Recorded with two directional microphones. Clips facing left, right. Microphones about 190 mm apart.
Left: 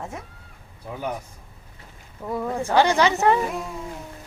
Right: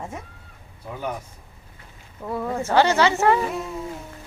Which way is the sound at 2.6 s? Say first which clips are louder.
Even; 15° left (ahead or behind).